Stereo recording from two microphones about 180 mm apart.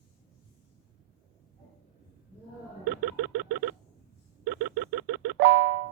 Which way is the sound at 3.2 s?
70° right (ahead or behind).